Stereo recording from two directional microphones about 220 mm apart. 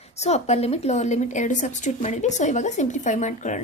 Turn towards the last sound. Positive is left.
turn(degrees=35)  # may be behind; listen again after turning